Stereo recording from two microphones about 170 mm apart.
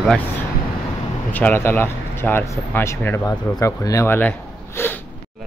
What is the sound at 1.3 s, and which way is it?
Speech, 10° left (ahead or behind).